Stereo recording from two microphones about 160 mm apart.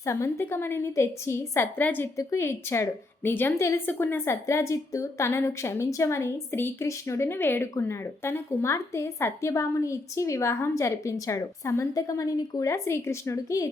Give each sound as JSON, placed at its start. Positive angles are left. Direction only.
{"t": 0.0, "sound": "a woman's voice", "side_deg": 20}